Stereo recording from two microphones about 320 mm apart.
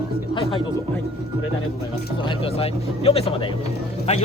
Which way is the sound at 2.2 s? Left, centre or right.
Centre.